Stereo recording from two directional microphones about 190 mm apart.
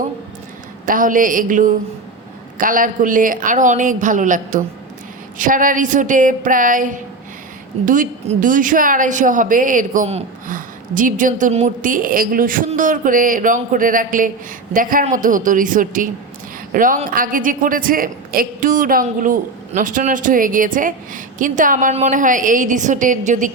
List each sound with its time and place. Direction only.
0.9 s a woman's voice: 45° right (ahead or behind)